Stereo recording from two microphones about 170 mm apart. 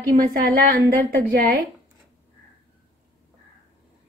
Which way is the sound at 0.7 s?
60° right (ahead or behind).